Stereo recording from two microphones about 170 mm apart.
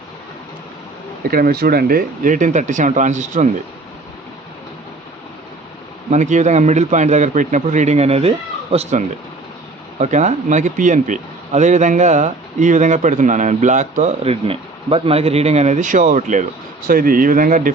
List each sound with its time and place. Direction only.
1.3 s speech: 60° right (ahead or behind); by 3.5 s 45° right (ahead or behind)
6.1 s speech: 45° right (ahead or behind)